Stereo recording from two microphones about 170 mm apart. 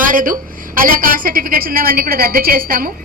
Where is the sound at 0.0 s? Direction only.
50° right (ahead or behind).